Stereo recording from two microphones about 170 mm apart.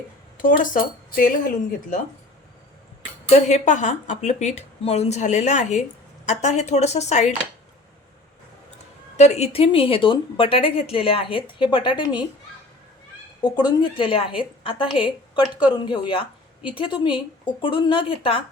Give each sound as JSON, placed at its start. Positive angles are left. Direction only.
{"t": 0.3, "sound": "speech", "side_deg": 55}
{"t": 3.2, "sound": "speech", "side_deg": 45}
{"t": 9.1, "sound": "a woman's voice", "side_deg": 40}
{"t": 13.4, "sound": "a woman's voice", "side_deg": 25}